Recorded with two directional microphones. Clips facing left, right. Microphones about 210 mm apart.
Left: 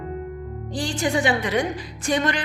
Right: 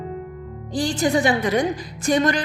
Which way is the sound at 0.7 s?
40° right (ahead or behind).